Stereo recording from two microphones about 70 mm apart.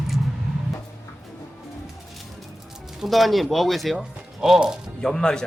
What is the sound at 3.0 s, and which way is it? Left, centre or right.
Speech, centre.